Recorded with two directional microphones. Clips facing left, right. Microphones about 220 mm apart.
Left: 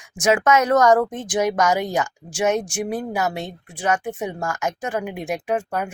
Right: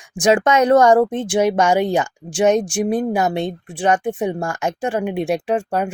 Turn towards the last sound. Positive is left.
turn(degrees=-30)  # may be behind; listen again after turning